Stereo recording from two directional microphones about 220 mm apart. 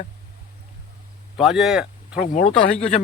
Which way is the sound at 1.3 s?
Centre (ahead or behind).